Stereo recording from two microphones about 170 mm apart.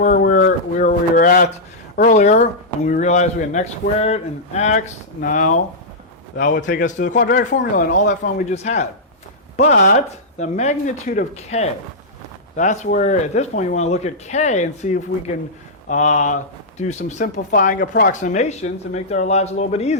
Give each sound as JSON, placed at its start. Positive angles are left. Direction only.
{"t": 0.0, "sound": "a sound", "side_deg": 50}
{"t": 2.0, "sound": "speech", "side_deg": 45}
{"t": 6.6, "sound": "speech", "side_deg": 50}